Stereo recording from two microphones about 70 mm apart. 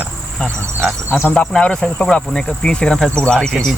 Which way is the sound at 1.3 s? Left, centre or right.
Centre.